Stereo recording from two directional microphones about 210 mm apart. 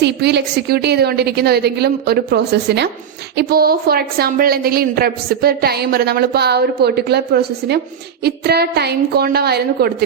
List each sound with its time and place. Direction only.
0.0 s a woman's voice: 50° right (ahead or behind)